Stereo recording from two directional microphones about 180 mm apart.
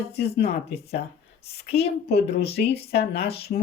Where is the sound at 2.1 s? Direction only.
60° left (ahead or behind).